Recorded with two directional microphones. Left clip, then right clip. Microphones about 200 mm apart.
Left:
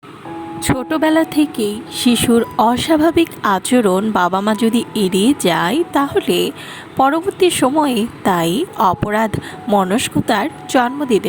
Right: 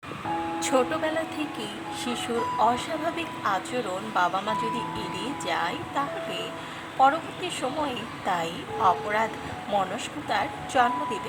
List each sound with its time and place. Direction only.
0.6 s speech: 35° left (ahead or behind)